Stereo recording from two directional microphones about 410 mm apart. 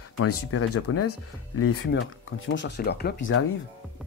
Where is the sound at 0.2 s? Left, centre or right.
Left.